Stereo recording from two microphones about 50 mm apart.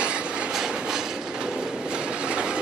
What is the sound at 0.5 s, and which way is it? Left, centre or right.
Train, centre.